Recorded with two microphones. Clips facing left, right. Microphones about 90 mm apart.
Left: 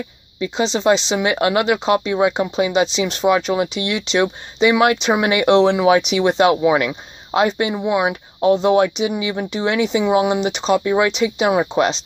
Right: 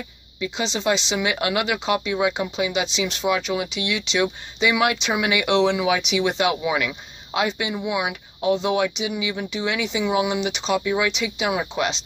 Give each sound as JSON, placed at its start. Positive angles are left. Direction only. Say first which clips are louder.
{"t": 0.4, "sound": "speech", "louder": "left 6 dB", "side_deg": 35}